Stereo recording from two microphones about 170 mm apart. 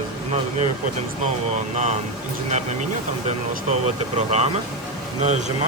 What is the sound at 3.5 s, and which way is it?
Speech, 40° right (ahead or behind).